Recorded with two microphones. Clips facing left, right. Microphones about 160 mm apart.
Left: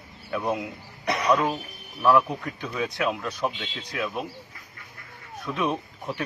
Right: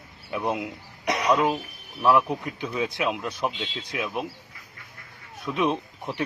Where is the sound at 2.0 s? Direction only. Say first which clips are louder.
Even; 15° right (ahead or behind).